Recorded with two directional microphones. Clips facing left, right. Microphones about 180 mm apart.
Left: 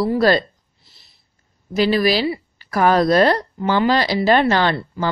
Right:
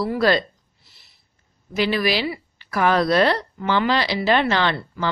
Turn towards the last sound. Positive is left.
turn(degrees=40)  # may be behind; listen again after turning